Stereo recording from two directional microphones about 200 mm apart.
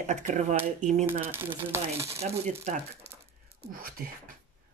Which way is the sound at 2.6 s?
35° right (ahead or behind).